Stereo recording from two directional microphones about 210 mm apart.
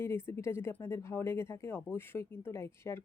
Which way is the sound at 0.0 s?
10° left (ahead or behind).